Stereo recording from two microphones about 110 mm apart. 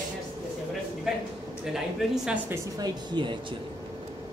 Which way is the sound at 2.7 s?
40° right (ahead or behind).